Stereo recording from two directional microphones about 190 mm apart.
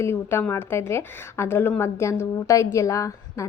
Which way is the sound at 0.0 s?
15° left (ahead or behind).